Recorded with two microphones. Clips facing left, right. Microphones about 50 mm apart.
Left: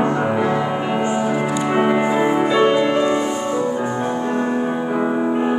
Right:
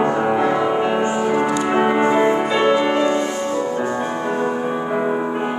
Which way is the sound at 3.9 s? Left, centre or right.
Centre.